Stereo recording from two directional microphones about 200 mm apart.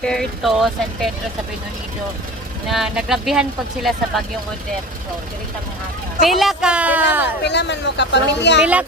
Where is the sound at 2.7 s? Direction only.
Centre (ahead or behind).